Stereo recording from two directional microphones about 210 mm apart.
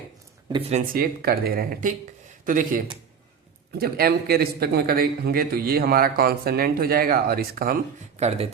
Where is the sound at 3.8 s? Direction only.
45° right (ahead or behind).